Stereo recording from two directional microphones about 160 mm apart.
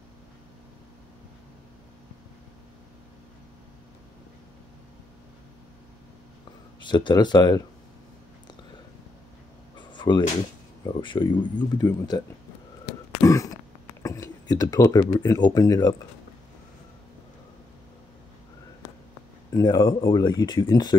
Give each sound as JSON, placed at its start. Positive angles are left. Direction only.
{"t": 6.8, "sound": "speech", "side_deg": 30}
{"t": 9.8, "sound": "a sound", "side_deg": 30}
{"t": 10.8, "sound": "speech", "side_deg": 30}
{"t": 13.2, "sound": "a sound", "side_deg": 20}
{"t": 14.0, "sound": "speech", "side_deg": 20}
{"t": 19.5, "sound": "speech", "side_deg": 25}